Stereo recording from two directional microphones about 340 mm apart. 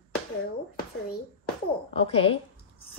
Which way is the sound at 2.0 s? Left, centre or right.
Centre.